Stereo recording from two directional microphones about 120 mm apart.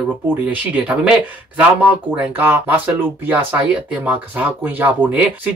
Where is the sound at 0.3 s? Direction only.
15° right (ahead or behind).